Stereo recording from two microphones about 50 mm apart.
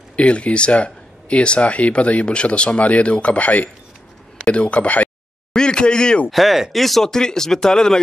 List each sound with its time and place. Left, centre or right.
0.1 s speech: left
5.5 s a sound: centre
6.3 s speech: centre